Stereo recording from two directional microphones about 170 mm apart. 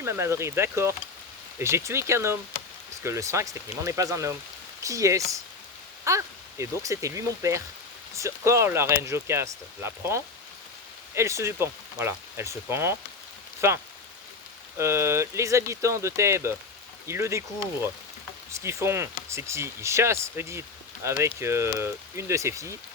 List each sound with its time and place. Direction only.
0.0 s speech: 15° right (ahead or behind)